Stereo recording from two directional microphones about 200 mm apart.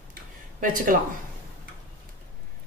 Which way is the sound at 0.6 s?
40° right (ahead or behind).